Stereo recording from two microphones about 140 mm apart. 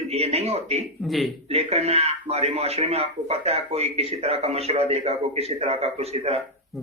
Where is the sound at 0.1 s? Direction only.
45° right (ahead or behind).